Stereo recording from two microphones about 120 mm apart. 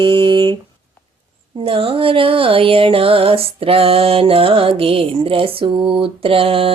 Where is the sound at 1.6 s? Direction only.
50° right (ahead or behind).